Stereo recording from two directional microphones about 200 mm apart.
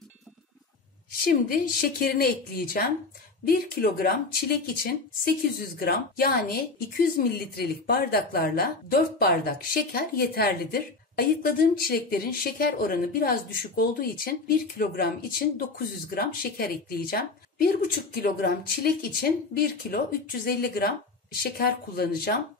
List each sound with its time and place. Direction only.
1.2 s speech: 50° left (ahead or behind)
16.2 s speech: 50° left (ahead or behind)